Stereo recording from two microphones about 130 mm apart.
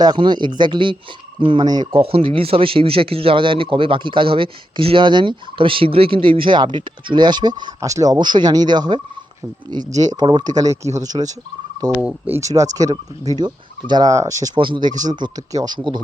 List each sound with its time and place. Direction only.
0.0 s speech: 35° right (ahead or behind)
1.9 s speech: 45° right (ahead or behind); by 8.2 s 25° right (ahead or behind)
8.2 s speech: 35° right (ahead or behind)
11.9 s speech: 10° right (ahead or behind)
12.4 s speech: 25° right (ahead or behind)
14.5 s speech: 40° right (ahead or behind)